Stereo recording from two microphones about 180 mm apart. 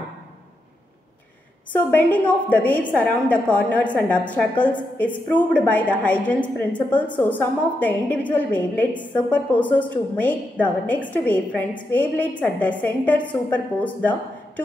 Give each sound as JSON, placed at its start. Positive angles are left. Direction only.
{"t": 1.7, "sound": "a woman's voice", "side_deg": 10}